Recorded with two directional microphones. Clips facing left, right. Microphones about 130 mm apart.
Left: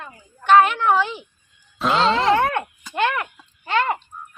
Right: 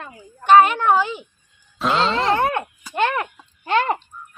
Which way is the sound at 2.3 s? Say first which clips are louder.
Left 1 dB; 25° right (ahead or behind).